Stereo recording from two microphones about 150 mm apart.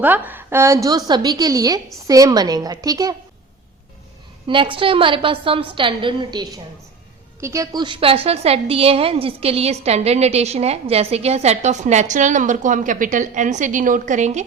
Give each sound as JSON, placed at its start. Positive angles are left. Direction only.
{"t": 0.0, "sound": "a woman's voice", "side_deg": -10}
{"t": 4.4, "sound": "a woman's voice", "side_deg": -35}